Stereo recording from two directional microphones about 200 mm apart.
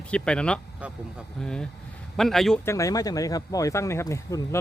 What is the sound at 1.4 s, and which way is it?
Speech, 5° left (ahead or behind).